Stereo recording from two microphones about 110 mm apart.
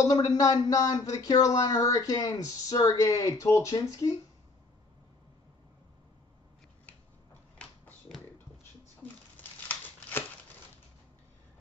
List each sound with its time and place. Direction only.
0.0 s speech: 35° left (ahead or behind)
9.0 s crumpling: 15° left (ahead or behind)